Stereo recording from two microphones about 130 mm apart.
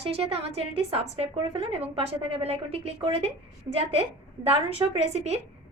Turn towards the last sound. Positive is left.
turn(degrees=-55)  # may be behind; listen again after turning